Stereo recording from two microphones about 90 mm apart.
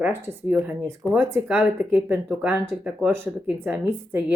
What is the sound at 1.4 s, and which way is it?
Speech, 15° right (ahead or behind).